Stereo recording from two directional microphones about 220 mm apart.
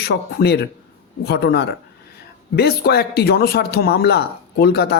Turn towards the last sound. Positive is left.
turn(degrees=45)  # may be behind; listen again after turning